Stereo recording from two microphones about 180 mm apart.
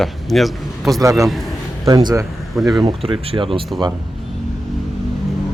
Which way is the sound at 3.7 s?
Centre (ahead or behind).